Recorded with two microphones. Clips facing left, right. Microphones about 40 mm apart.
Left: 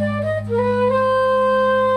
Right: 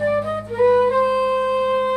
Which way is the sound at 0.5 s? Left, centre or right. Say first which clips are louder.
Right 4 dB; centre.